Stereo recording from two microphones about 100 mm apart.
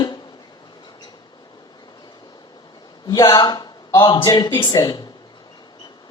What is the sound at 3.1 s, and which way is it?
A man's voice, 40° left (ahead or behind).